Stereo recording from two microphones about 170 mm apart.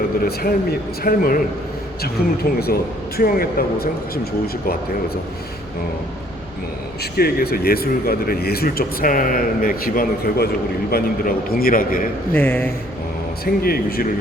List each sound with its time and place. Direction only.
1.0 s speech: 60° left (ahead or behind)
7.0 s speech: 65° left (ahead or behind)
12.3 s speech: 10° left (ahead or behind)
13.4 s speech: 60° left (ahead or behind)